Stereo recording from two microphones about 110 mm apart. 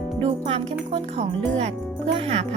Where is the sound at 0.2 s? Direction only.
60° right (ahead or behind).